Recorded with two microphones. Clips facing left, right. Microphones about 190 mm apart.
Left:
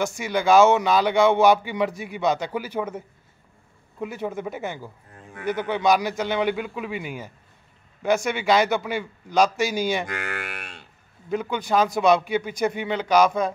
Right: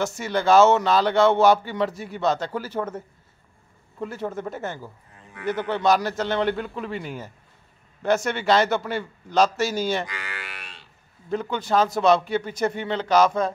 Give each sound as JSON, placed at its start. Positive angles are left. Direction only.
{"t": 0.0, "sound": "a man's voice", "side_deg": 10}
{"t": 4.0, "sound": "a man's voice", "side_deg": 10}
{"t": 10.0, "sound": "a sound", "side_deg": 50}
{"t": 11.2, "sound": "a man's voice", "side_deg": 10}